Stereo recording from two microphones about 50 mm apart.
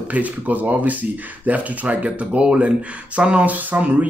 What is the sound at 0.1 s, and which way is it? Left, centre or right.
Speech, right.